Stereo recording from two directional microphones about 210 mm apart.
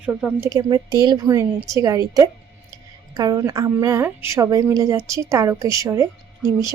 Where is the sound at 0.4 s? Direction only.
20° right (ahead or behind).